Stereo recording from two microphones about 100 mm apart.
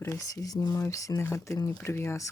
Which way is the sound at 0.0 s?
30° left (ahead or behind).